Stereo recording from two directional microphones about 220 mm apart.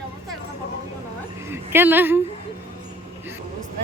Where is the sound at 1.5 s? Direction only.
10° right (ahead or behind).